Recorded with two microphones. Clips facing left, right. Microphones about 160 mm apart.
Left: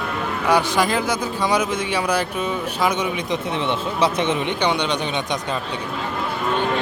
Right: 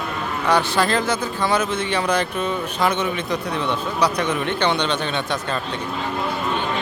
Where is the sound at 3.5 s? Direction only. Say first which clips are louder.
Left 1 dB; 25° left (ahead or behind).